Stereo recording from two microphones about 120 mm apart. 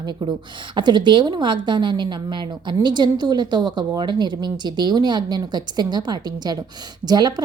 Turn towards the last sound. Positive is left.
turn(degrees=-35)  # may be behind; listen again after turning